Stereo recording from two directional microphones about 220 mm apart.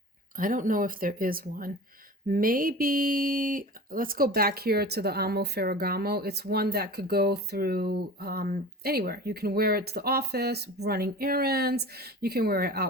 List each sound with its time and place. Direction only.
0.3 s speech: 40° right (ahead or behind)